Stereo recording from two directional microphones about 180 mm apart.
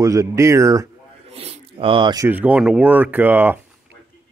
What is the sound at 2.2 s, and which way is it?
Speech, 10° right (ahead or behind).